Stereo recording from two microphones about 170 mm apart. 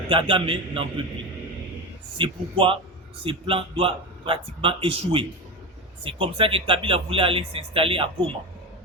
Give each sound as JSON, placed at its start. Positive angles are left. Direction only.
{"t": 0.1, "sound": "speech", "side_deg": -30}
{"t": 2.1, "sound": "speech", "side_deg": -30}